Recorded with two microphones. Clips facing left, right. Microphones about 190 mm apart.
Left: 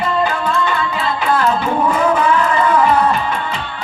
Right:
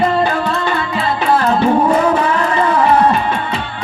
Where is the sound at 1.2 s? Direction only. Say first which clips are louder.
Right 3 dB; 35° right (ahead or behind).